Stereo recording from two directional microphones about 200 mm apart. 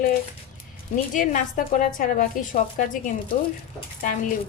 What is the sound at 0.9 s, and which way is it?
A woman's voice, 40° left (ahead or behind).